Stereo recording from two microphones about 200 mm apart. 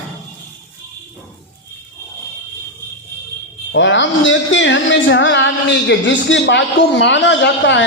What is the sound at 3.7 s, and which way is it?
Speech, 65° left (ahead or behind).